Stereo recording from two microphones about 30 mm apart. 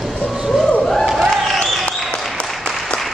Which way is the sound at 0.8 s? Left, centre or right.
Centre.